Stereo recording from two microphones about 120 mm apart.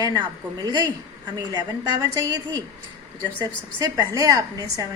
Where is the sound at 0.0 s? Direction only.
35° right (ahead or behind).